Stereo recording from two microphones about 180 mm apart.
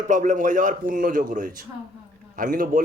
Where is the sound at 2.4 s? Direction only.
50° right (ahead or behind).